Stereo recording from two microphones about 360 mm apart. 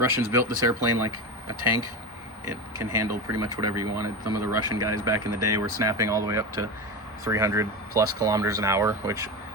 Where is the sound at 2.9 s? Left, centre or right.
Right.